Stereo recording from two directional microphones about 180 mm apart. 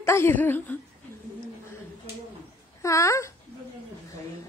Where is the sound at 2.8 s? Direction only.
15° left (ahead or behind).